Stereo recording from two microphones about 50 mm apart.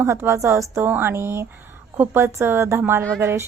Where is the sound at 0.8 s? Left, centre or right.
Right.